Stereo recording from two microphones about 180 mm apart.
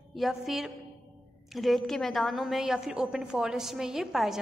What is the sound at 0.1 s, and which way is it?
A woman's voice, centre (ahead or behind).